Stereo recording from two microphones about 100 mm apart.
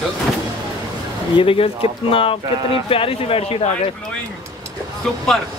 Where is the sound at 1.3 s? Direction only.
65° left (ahead or behind); by 3.9 s 80° left.